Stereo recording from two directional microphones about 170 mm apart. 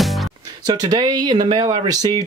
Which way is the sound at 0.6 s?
25° right (ahead or behind).